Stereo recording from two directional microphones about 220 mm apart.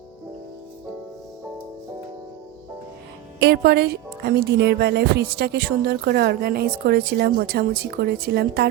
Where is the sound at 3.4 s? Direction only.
50° right (ahead or behind).